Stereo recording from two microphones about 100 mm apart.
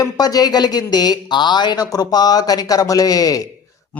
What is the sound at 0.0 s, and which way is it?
A man's voice, 40° left (ahead or behind).